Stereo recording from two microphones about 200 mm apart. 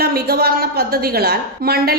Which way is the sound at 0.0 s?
50° right (ahead or behind).